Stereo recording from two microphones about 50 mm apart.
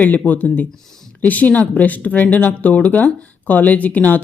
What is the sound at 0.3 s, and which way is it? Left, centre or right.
Speech, left.